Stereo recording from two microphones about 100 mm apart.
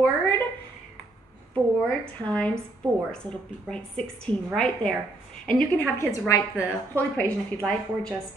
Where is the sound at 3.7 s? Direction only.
10° left (ahead or behind).